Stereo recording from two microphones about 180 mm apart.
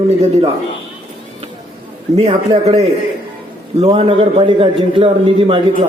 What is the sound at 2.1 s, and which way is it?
Speech, 35° right (ahead or behind).